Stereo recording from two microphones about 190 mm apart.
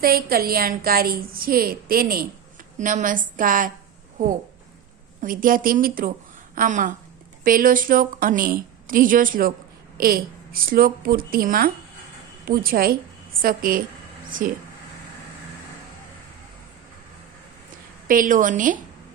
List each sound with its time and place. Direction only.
0.0 s a woman's voice: 50° right (ahead or behind)
5.2 s a woman's voice: 45° right (ahead or behind)
18.1 s a woman's voice: 45° right (ahead or behind)